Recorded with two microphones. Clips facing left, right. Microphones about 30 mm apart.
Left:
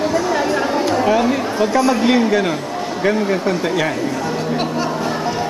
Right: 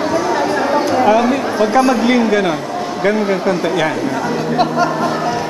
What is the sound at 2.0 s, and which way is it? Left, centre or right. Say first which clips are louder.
Speech: right 2 dB; centre.